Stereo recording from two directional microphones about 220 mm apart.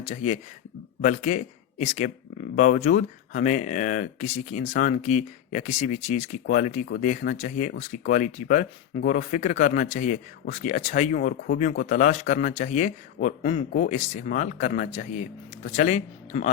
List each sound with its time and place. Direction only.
0.0 s speech: 30° left (ahead or behind)